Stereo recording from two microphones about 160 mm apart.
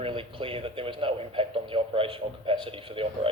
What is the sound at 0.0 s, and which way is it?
A man's voice, 30° right (ahead or behind).